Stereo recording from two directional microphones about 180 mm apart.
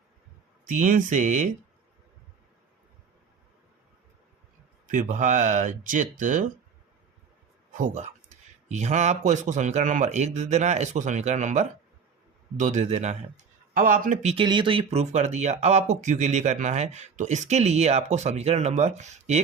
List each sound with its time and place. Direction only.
0.6 s a man's voice: 45° right (ahead or behind)
4.9 s a man's voice: 45° right (ahead or behind)
7.7 s a man's voice: 45° right (ahead or behind)
14.4 s speech: 25° right (ahead or behind)